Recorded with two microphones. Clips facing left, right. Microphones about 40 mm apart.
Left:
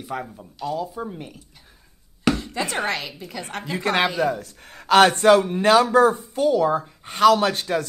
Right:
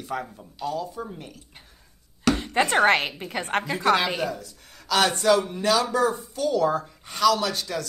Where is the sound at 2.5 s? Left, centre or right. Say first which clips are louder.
Right 6 dB; right.